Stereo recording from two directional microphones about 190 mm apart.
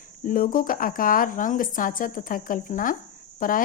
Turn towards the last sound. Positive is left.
turn(degrees=45)  # may be behind; listen again after turning